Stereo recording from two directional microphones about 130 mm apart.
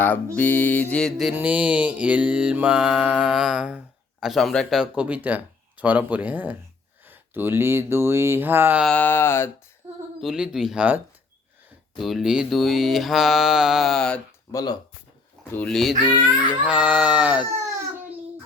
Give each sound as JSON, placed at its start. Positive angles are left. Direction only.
{"t": 0.3, "sound": "mantra", "side_deg": 15}
{"t": 1.3, "sound": "mantra", "side_deg": -10}
{"t": 7.0, "sound": "speech", "side_deg": -15}
{"t": 8.8, "sound": "mantra", "side_deg": 10}
{"t": 10.2, "sound": "mantra", "side_deg": -5}
{"t": 14.5, "sound": "speech", "side_deg": 30}
{"t": 15.5, "sound": "mantra", "side_deg": 5}
{"t": 16.5, "sound": "mantra", "side_deg": -10}